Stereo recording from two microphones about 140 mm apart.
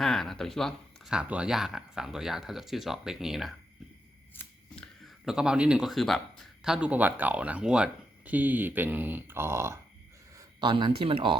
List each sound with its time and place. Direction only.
0.0 s speech: centre (ahead or behind)
4.4 s a sound: 5° left (ahead or behind)
6.7 s speech: 10° right (ahead or behind)
10.6 s speech: 35° right (ahead or behind)